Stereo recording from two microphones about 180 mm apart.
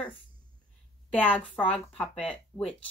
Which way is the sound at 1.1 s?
10° left (ahead or behind).